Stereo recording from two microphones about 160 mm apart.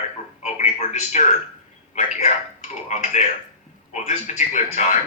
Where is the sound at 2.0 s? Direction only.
45° left (ahead or behind).